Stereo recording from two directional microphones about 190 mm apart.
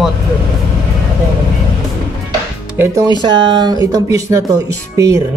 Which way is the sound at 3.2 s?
25° right (ahead or behind).